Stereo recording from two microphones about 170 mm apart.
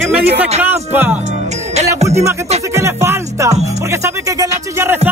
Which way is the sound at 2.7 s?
15° right (ahead or behind).